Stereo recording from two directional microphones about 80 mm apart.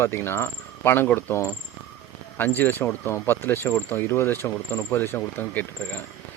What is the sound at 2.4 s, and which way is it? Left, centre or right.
Speech, left.